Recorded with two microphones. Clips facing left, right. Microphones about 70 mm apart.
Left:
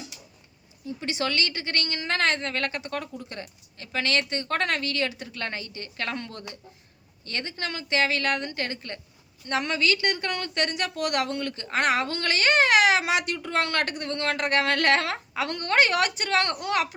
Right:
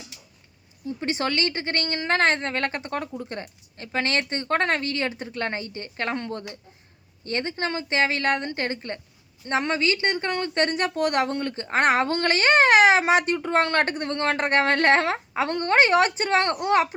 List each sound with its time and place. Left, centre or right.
0.9 s a woman's voice: right